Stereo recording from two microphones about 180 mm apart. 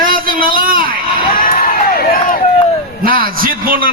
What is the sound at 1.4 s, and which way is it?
Crowd, 55° left (ahead or behind).